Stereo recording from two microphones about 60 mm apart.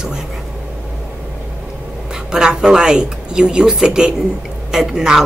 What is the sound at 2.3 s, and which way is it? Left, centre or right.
Speech, centre.